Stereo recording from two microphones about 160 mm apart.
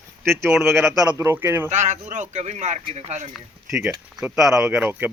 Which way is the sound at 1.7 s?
45° right (ahead or behind).